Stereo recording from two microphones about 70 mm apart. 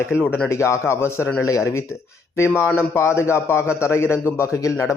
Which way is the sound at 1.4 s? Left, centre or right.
Left.